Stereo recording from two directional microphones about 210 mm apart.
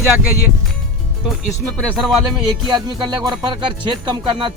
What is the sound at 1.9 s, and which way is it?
Speech, centre (ahead or behind).